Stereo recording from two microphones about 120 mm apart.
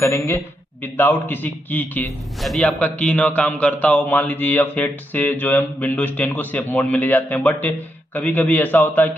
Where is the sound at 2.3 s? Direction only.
Centre (ahead or behind).